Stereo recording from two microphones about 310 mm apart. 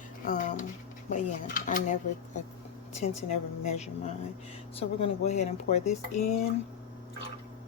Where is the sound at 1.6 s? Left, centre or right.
Left.